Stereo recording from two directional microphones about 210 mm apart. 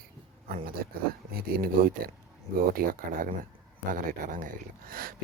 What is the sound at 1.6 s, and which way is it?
Speech, 45° right (ahead or behind).